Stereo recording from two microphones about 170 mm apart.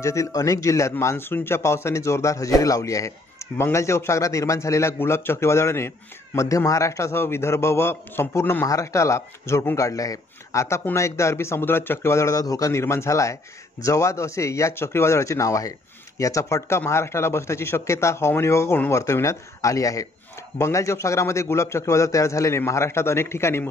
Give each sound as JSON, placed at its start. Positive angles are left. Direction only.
{"t": 0.0, "sound": "a man's voice", "side_deg": 15}